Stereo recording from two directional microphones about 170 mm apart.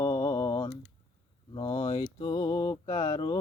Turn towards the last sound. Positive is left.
turn(degrees=25)  # may be behind; listen again after turning